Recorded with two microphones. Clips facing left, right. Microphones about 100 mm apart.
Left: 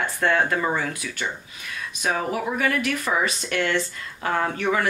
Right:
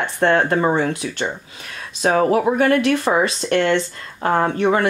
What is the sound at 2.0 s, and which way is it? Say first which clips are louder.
Speech: right 9 dB; 45° right (ahead or behind).